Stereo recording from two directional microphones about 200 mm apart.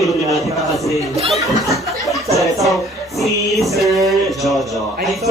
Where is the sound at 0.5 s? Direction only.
Centre (ahead or behind).